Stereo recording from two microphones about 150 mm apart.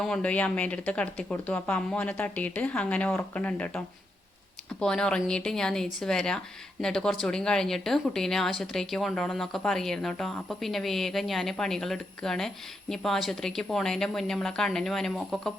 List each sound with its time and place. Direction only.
0.0 s speech: 5° left (ahead or behind)